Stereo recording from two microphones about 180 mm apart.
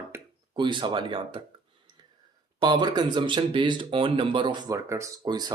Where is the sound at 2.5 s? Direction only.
25° right (ahead or behind).